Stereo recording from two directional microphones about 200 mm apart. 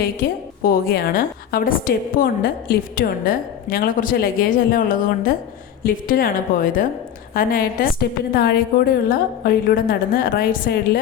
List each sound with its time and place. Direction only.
0.2 s a woman's voice: 50° left (ahead or behind)